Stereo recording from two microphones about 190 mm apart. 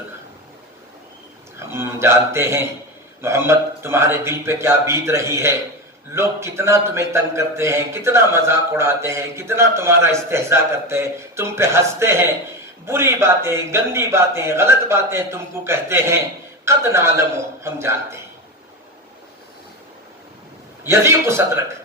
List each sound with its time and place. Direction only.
1.5 s a man's voice: 15° right (ahead or behind)
20.8 s a man's voice: 15° right (ahead or behind)